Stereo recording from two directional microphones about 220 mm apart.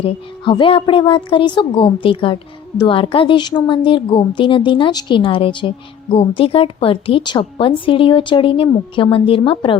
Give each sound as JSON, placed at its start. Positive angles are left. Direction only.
{"t": 0.0, "sound": "a woman's voice", "side_deg": 25}